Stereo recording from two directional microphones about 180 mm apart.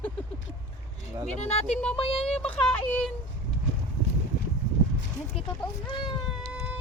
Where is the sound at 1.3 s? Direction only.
35° left (ahead or behind).